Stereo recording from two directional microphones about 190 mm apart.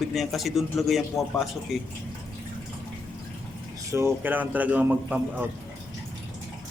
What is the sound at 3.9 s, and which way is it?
A man's voice, 10° right (ahead or behind).